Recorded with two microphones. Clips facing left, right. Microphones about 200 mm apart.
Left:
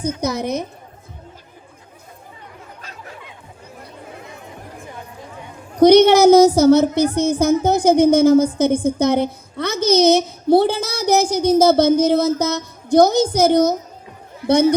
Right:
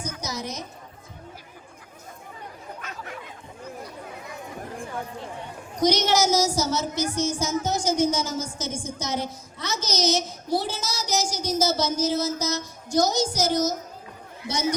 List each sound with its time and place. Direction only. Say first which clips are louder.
0.2 s a woman's voice: left 11 dB; 60° left (ahead or behind)
5.7 s a woman's voice: left 12 dB; 60° left (ahead or behind)